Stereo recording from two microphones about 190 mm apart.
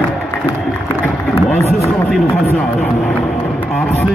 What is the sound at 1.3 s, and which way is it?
Run, 35° left (ahead or behind).